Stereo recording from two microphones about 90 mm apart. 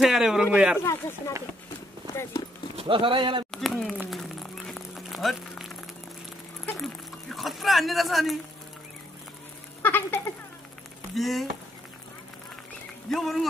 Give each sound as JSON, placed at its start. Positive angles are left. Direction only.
{"t": 0.0, "sound": "speech", "side_deg": -5}
{"t": 0.8, "sound": "speech", "side_deg": 35}
{"t": 2.8, "sound": "speech", "side_deg": -75}
{"t": 3.5, "sound": "a sound", "side_deg": 0}
{"t": 6.8, "sound": "speech", "side_deg": 0}
{"t": 9.8, "sound": "a sound", "side_deg": 25}
{"t": 11.1, "sound": "speech", "side_deg": 0}
{"t": 13.1, "sound": "speech", "side_deg": 0}